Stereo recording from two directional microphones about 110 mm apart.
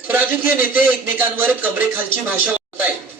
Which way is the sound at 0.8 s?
15° right (ahead or behind).